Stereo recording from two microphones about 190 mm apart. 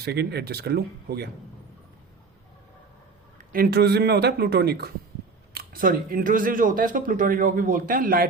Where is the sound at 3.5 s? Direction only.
55° right (ahead or behind).